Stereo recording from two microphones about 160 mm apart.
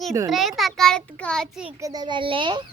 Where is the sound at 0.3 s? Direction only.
Centre (ahead or behind).